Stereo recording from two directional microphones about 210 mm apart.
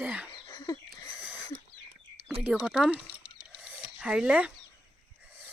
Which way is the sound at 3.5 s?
5° right (ahead or behind).